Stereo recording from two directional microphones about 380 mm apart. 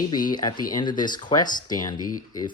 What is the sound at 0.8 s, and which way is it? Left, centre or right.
Speech, centre.